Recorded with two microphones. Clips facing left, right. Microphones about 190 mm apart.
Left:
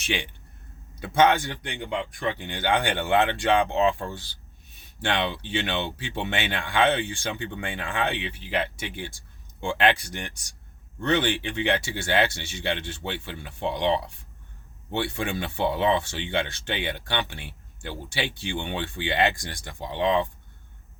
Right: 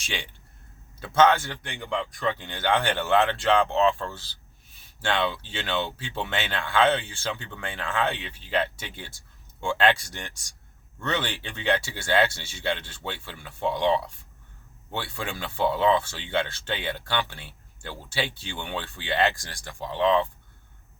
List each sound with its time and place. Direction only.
0.0 s speech: 15° left (ahead or behind)